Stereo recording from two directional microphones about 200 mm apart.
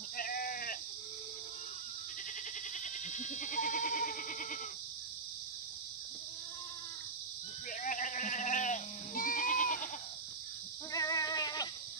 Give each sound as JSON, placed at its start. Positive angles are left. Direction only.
{"t": 0.2, "sound": "sheep", "side_deg": 45}
{"t": 2.8, "sound": "goat", "side_deg": 40}
{"t": 7.8, "sound": "sheep", "side_deg": 40}
{"t": 10.9, "sound": "a sound", "side_deg": 15}